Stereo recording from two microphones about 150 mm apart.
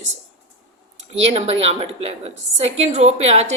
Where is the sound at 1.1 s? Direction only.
40° right (ahead or behind).